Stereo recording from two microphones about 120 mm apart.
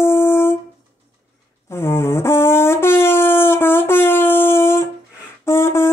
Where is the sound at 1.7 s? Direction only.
20° left (ahead or behind).